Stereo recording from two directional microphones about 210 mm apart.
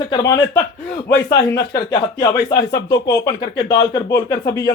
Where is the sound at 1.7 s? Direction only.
20° left (ahead or behind).